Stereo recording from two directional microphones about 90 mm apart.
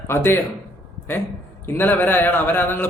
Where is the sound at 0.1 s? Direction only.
25° left (ahead or behind).